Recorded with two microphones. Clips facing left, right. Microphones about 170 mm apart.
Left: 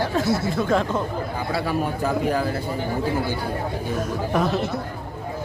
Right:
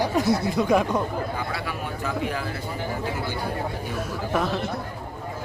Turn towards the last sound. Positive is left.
turn(degrees=-5)  # may be behind; listen again after turning